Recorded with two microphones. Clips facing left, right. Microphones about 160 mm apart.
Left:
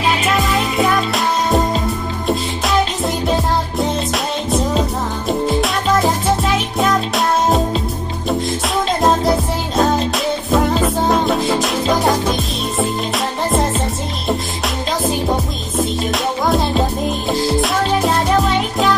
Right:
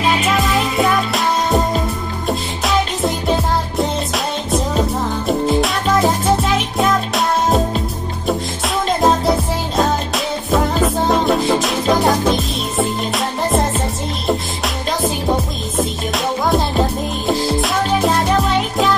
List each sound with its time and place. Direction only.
0.4 s music: centre (ahead or behind)
3.7 s music: centre (ahead or behind)
6.4 s music: centre (ahead or behind)
17.3 s music: centre (ahead or behind)